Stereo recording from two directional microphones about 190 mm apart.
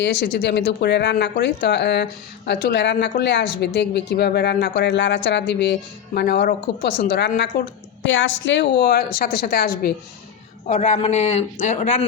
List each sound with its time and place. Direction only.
0.0 s speech: 65° left (ahead or behind)
8.0 s speech: 85° left; by 9.9 s 55° left (ahead or behind)
10.7 s a man's voice: 35° left (ahead or behind)